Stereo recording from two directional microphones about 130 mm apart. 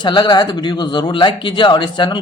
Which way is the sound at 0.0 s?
35° left (ahead or behind).